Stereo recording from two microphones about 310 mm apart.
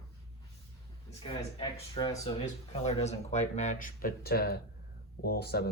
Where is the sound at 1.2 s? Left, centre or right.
Centre.